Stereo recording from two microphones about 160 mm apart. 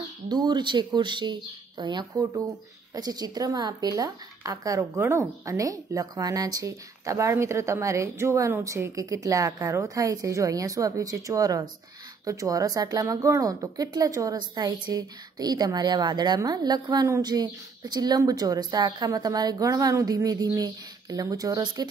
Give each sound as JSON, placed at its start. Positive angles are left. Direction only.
{"t": 0.3, "sound": "a woman's voice", "side_deg": -25}